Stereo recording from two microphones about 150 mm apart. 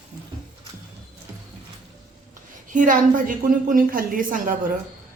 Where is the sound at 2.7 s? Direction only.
60° right (ahead or behind).